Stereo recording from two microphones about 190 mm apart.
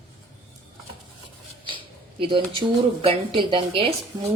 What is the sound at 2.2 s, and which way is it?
A woman's voice, 25° right (ahead or behind).